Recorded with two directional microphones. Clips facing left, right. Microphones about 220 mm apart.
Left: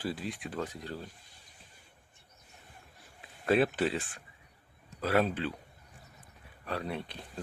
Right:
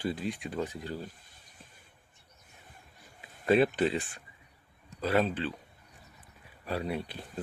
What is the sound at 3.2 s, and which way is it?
Speech, centre (ahead or behind).